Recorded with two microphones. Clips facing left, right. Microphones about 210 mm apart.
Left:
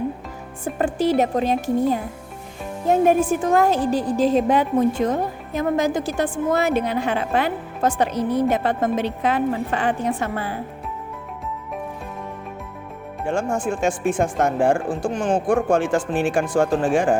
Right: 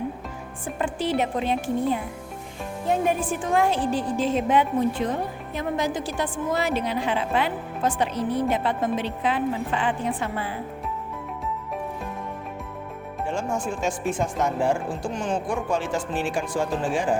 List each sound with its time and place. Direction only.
0.6 s a woman's voice: 40° left (ahead or behind)
13.2 s a woman's voice: 50° left (ahead or behind)